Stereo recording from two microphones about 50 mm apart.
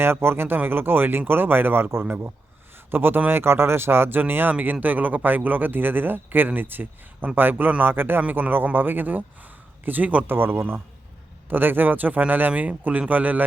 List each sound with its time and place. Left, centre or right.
0.0 s speech: right
10.2 s speech: right